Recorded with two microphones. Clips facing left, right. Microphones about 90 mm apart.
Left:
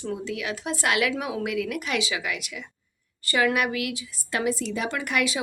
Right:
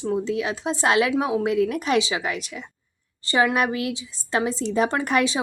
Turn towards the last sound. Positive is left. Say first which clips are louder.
# right 5 dB
turn(degrees=-30)  # may be behind; listen again after turning